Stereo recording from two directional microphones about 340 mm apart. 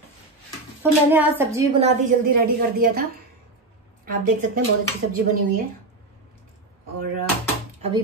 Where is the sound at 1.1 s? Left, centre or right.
Centre; by 4.5 s right.